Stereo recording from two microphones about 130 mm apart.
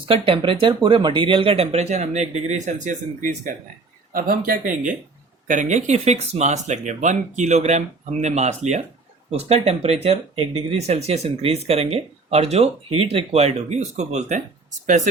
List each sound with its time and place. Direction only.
0.0 s speech: 45° right (ahead or behind); by 4.9 s 90° right
5.5 s speech: 70° right (ahead or behind)